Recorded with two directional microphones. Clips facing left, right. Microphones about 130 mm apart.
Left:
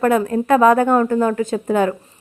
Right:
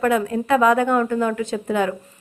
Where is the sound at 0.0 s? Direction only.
45° left (ahead or behind).